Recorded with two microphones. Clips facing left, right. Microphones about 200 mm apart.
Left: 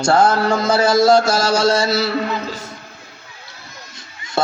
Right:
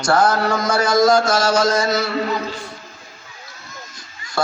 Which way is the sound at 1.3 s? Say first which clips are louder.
Left 1 dB; 35° left (ahead or behind).